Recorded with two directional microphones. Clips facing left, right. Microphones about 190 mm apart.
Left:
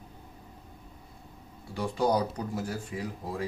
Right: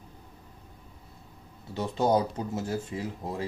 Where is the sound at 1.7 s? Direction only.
25° right (ahead or behind).